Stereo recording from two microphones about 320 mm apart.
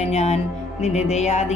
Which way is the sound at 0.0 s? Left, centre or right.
Centre.